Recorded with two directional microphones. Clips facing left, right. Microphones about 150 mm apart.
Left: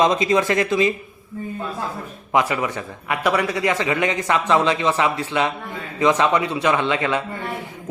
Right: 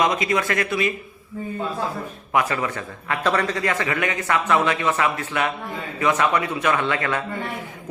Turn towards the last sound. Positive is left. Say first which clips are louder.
# left 2 dB
turn(degrees=15)  # may be behind; listen again after turning